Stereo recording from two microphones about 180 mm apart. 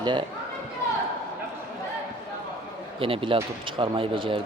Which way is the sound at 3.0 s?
30° right (ahead or behind).